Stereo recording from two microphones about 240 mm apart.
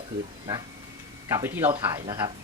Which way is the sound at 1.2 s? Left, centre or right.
Centre.